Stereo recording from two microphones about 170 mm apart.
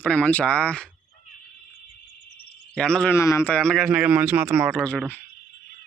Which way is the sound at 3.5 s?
5° left (ahead or behind).